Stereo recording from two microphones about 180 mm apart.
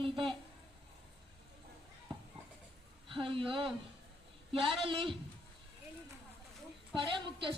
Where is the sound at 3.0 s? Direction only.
30° right (ahead or behind).